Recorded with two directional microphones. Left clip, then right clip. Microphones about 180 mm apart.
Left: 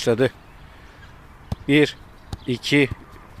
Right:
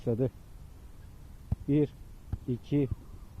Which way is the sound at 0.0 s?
35° left (ahead or behind).